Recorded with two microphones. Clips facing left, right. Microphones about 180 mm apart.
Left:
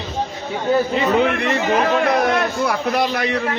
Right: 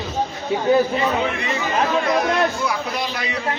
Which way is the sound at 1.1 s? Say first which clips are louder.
Left 5 dB; 65° left (ahead or behind).